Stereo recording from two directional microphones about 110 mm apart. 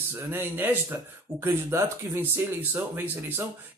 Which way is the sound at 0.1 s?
20° right (ahead or behind).